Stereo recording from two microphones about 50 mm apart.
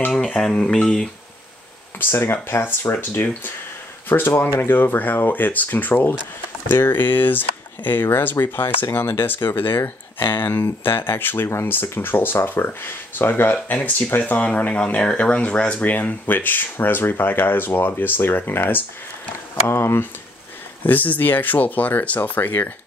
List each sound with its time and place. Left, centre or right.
0.4 s speech: centre
2.0 s speech: left
14.4 s speech: left
15.8 s speech: left
20.8 s speech: left